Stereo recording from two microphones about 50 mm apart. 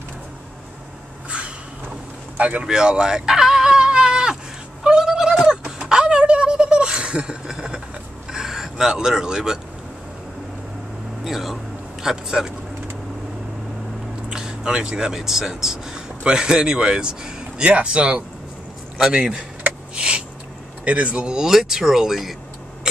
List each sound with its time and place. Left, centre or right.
2.3 s speech: right
2.6 s a sound: centre
8.3 s vehicle: centre
11.2 s a man's voice: centre
14.3 s speech: centre
18.9 s speech: centre
20.0 s a sound: right
20.8 s speech: right
21.4 s speech: centre